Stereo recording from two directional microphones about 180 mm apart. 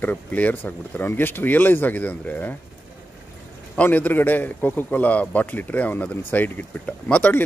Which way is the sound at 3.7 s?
10° left (ahead or behind).